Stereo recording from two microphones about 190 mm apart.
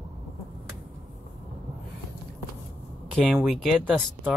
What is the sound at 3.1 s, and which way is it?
Speech, centre (ahead or behind).